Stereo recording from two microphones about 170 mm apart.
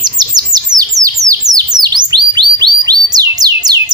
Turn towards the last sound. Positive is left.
turn(degrees=-25)  # may be behind; listen again after turning